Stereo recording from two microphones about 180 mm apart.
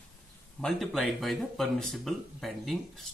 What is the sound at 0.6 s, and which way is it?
Speech, centre (ahead or behind).